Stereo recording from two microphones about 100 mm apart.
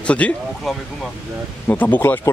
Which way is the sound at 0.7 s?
Centre (ahead or behind).